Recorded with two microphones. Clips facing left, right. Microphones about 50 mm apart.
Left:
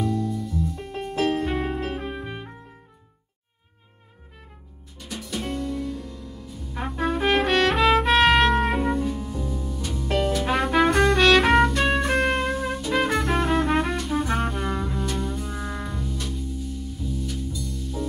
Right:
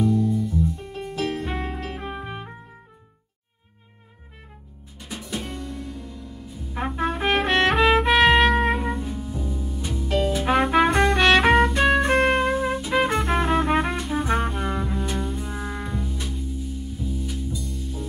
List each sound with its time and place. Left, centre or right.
0.0 s music: centre
0.7 s music: left
1.3 s music: centre
4.9 s music: centre
6.0 s trumpet: centre
8.4 s music: centre
11.5 s trumpet: centre
12.1 s music: centre